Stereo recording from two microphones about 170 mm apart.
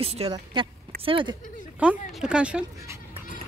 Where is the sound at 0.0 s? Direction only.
35° right (ahead or behind).